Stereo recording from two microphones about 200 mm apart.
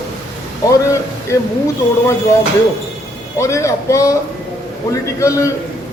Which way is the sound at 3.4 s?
15° left (ahead or behind).